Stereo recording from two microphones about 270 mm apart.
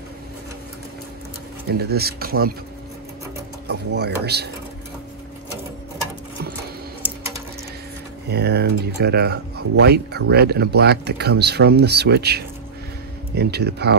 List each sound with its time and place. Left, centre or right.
1.7 s speech: right
3.6 s speech: right
8.3 s speech: right